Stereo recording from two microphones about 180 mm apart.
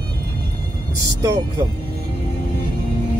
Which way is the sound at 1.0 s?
20° right (ahead or behind).